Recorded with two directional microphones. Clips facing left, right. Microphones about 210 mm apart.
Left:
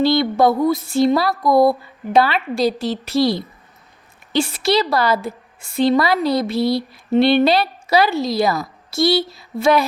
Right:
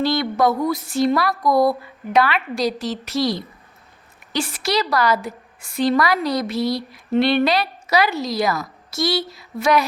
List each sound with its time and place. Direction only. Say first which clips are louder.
0.0 s a woman's voice: left 4 dB; 30° left (ahead or behind)